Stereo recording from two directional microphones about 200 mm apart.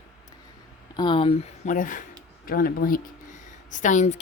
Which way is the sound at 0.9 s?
20° left (ahead or behind).